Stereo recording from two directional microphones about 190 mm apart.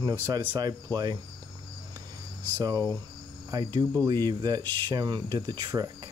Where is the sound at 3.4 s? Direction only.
20° right (ahead or behind).